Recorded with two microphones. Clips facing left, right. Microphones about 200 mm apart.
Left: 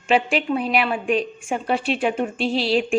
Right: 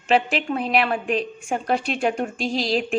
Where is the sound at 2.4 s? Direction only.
40° right (ahead or behind).